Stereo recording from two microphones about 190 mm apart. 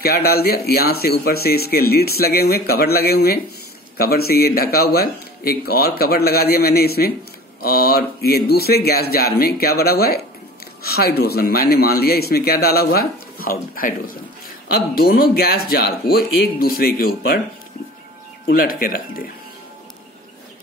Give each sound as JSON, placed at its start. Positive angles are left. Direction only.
{"t": 0.0, "sound": "speech", "side_deg": 55}
{"t": 18.5, "sound": "speech", "side_deg": 50}